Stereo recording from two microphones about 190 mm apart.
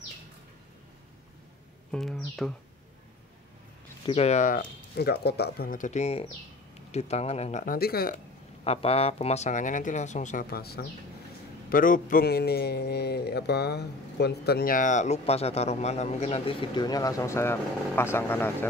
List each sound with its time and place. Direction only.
1.9 s music: centre (ahead or behind)
4.0 s a man's voice: 30° left (ahead or behind); by 8.2 s 55° left (ahead or behind)
8.6 s a man's voice: 30° left (ahead or behind); by 18.7 s 10° left (ahead or behind)